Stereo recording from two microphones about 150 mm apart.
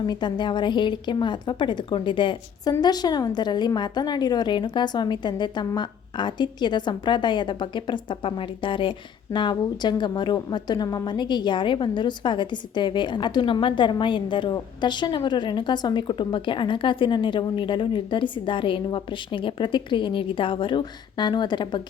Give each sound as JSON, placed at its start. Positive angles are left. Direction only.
{"t": 0.0, "sound": "a woman's voice", "side_deg": 30}